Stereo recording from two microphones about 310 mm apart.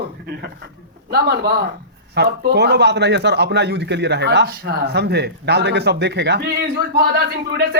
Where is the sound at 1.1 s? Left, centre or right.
Right.